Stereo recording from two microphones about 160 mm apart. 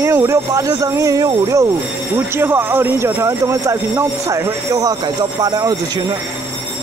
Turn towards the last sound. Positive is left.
turn(degrees=-25)  # may be behind; listen again after turning